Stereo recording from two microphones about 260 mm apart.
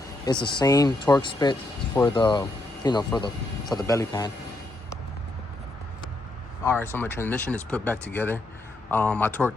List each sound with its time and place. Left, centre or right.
0.3 s speech: centre
6.7 s speech: centre